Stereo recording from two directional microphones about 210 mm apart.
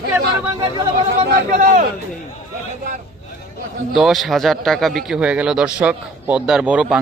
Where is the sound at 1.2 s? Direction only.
35° right (ahead or behind).